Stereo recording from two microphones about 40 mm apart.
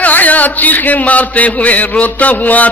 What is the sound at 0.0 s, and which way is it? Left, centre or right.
A man's voice, left.